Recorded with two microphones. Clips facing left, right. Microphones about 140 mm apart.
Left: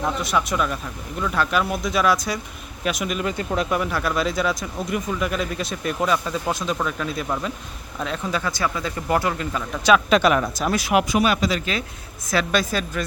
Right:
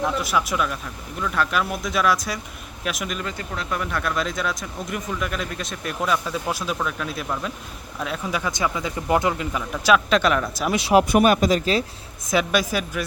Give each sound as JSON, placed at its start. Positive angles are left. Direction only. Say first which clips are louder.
{"t": 0.2, "sound": "speech", "louder": "left 1 dB", "side_deg": -5}
{"t": 3.2, "sound": "speech", "louder": "left 7 dB", "side_deg": 20}
{"t": 3.7, "sound": "speech", "louder": "left 3 dB", "side_deg": 5}
{"t": 9.5, "sound": "speech", "louder": "left 3 dB", "side_deg": -5}
{"t": 10.8, "sound": "speech", "louder": "right 4 dB", "side_deg": -30}
{"t": 11.1, "sound": "speech", "louder": "right 3 dB", "side_deg": -50}
{"t": 12.3, "sound": "speech", "louder": "right 1 dB", "side_deg": -15}